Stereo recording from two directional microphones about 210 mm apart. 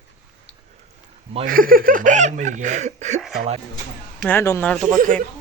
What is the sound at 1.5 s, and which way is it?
Speech, 45° right (ahead or behind).